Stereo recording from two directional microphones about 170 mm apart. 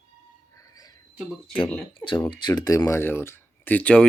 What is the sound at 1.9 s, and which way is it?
Speech, 30° left (ahead or behind).